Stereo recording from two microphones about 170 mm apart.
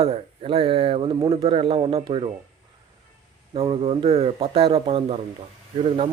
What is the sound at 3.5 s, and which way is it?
Speech, 30° right (ahead or behind).